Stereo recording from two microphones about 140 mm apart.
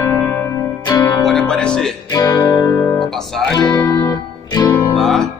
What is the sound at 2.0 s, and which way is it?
Music, 25° left (ahead or behind).